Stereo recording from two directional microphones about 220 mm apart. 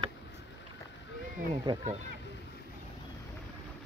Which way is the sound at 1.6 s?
20° right (ahead or behind).